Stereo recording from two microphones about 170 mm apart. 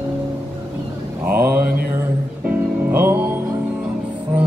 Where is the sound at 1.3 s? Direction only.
65° right (ahead or behind).